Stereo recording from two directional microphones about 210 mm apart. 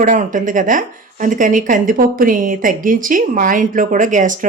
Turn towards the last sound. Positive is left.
turn(degrees=-40)  # may be behind; listen again after turning